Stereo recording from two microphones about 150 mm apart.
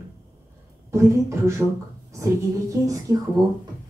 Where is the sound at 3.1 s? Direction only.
20° right (ahead or behind).